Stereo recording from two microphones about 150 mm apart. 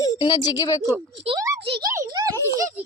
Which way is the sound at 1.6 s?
35° right (ahead or behind).